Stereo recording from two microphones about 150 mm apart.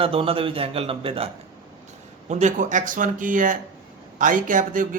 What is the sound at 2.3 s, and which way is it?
Speech, 55° right (ahead or behind).